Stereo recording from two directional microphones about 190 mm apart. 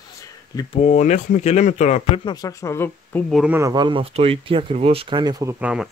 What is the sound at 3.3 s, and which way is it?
Speech, 5° right (ahead or behind).